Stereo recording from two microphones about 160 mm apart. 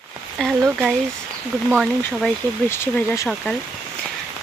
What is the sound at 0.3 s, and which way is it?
Speech, centre (ahead or behind).